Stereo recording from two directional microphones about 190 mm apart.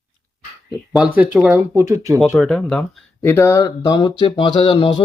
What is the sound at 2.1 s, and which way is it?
Speech, centre (ahead or behind).